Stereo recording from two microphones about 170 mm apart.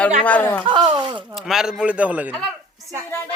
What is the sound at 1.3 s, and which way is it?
Speech, centre (ahead or behind).